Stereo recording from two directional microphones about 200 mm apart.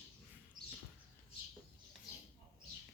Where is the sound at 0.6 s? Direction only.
20° right (ahead or behind).